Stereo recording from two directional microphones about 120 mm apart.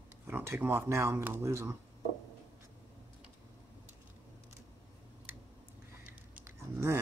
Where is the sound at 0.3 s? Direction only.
20° right (ahead or behind).